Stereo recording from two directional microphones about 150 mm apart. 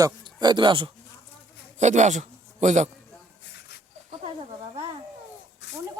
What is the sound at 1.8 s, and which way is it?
A man's voice, 50° right (ahead or behind).